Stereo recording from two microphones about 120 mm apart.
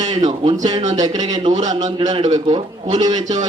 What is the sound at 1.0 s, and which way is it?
Speech, 35° right (ahead or behind).